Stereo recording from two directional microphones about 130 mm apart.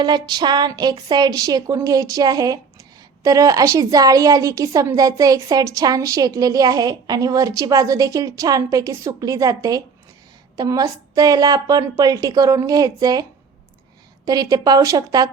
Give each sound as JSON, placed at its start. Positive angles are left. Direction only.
{"t": 0.0, "sound": "a woman's voice", "side_deg": -35}
{"t": 14.3, "sound": "a woman's voice", "side_deg": -30}